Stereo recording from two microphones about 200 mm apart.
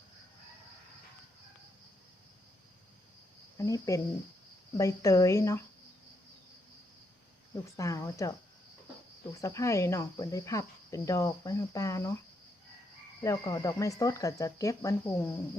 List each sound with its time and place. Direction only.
3.6 s speech: 15° left (ahead or behind)
7.5 s speech: 15° left (ahead or behind)
9.4 s speech: 15° left (ahead or behind)
13.2 s speech: 15° left (ahead or behind)